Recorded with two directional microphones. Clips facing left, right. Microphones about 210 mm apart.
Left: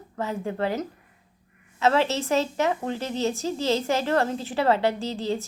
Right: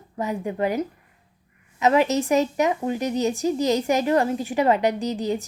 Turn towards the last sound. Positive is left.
turn(degrees=-15)  # may be behind; listen again after turning